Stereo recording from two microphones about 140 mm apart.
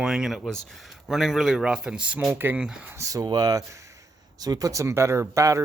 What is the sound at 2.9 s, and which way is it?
Speech, 25° right (ahead or behind).